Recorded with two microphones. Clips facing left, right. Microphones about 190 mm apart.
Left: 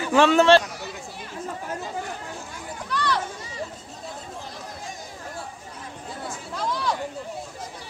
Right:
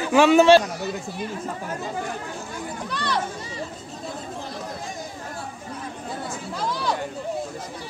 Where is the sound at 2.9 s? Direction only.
20° right (ahead or behind).